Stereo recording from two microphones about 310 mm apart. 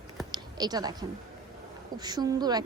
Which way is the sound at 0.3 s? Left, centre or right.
Centre.